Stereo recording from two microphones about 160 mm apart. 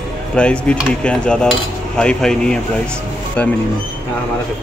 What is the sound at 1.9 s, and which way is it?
Speech, 5° left (ahead or behind).